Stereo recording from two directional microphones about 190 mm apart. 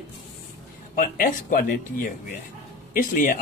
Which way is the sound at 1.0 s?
45° left (ahead or behind).